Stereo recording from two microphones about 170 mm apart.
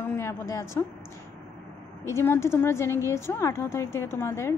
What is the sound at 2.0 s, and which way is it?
A woman's voice, 15° left (ahead or behind).